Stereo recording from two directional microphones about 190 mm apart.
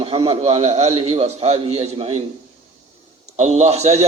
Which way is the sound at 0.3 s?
30° right (ahead or behind).